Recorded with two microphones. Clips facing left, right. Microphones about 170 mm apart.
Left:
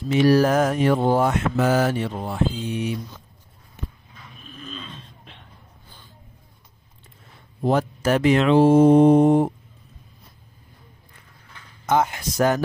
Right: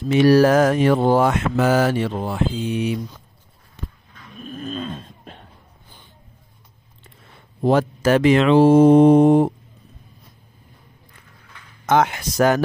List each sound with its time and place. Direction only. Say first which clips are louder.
0.1 s speech: right 3 dB; 70° right (ahead or behind); by 3.0 s 90° right
4.4 s a sound: right 10 dB; 45° right (ahead or behind)
7.6 s speech: right 4 dB; 90° right
11.8 s speech: right 3 dB; 80° right